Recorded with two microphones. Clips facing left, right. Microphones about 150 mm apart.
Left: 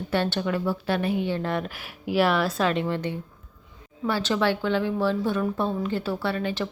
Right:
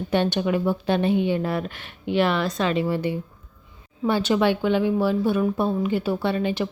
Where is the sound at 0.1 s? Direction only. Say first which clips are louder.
Right 3 dB; 15° right (ahead or behind).